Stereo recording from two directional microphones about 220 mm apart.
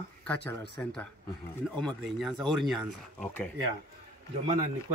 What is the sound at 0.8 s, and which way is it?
Speech, 10° left (ahead or behind).